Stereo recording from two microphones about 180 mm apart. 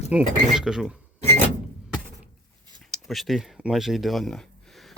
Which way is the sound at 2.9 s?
Centre (ahead or behind).